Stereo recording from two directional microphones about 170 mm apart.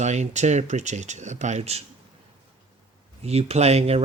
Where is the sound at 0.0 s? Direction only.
45° right (ahead or behind).